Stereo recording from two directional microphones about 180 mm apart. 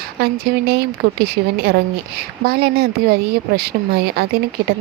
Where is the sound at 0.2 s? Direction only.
60° right (ahead or behind).